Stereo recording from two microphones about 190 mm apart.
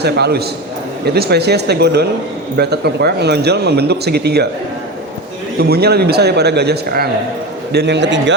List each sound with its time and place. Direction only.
0.0 s speech: 60° right (ahead or behind)
5.5 s a man's voice: 55° right (ahead or behind)